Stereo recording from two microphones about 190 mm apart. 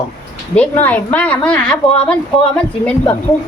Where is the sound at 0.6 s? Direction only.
10° left (ahead or behind).